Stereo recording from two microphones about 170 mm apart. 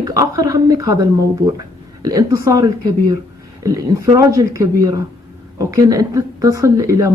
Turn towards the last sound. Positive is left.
turn(degrees=-20)  # may be behind; listen again after turning